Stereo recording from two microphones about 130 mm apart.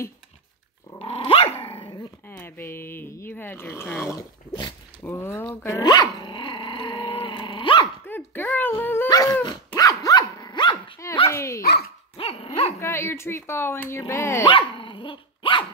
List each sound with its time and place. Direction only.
0.9 s dog: 45° left (ahead or behind)
2.2 s speech: 15° left (ahead or behind)
5.0 s dog: 15° left (ahead or behind); by 7.9 s 40° left (ahead or behind)
8.1 s dog: 15° left (ahead or behind)
9.1 s dog: 25° left (ahead or behind)
11.2 s dog: 20° left (ahead or behind)
12.2 s dog: 45° left (ahead or behind)
12.8 s speech: 20° left (ahead or behind)
14.5 s dog: 40° left (ahead or behind)